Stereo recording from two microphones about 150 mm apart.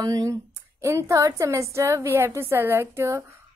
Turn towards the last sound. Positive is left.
turn(degrees=-20)  # may be behind; listen again after turning